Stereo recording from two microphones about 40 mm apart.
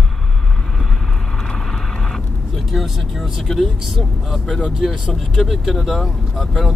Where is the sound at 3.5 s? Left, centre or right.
Centre.